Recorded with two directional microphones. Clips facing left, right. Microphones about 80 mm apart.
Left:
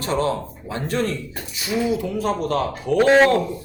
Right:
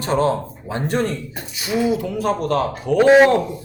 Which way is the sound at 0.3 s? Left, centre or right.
Centre.